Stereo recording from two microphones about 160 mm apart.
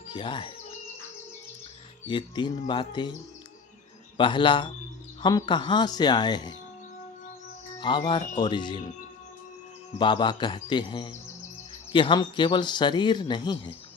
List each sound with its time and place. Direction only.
0.1 s music: 30° left (ahead or behind)
2.0 s speech: 30° left (ahead or behind)
4.2 s speech: 30° left (ahead or behind)
7.8 s speech: 30° left (ahead or behind)
10.0 s speech: 30° left (ahead or behind)